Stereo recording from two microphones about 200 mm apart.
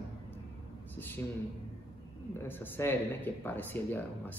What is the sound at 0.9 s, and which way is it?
Speech, 10° left (ahead or behind).